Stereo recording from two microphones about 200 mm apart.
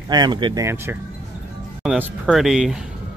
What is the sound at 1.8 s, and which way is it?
Speech, centre (ahead or behind).